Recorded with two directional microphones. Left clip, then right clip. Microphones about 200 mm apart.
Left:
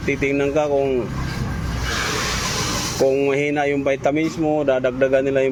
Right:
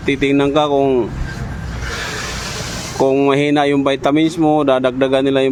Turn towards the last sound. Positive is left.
turn(degrees=-35)  # may be behind; listen again after turning